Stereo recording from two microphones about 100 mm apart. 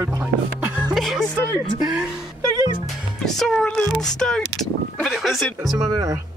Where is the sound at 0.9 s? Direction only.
Centre (ahead or behind).